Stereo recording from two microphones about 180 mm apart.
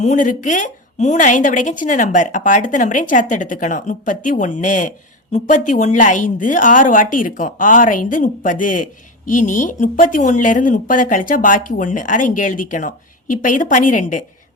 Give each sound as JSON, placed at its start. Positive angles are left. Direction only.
{"t": 0.0, "sound": "a woman's voice", "side_deg": 45}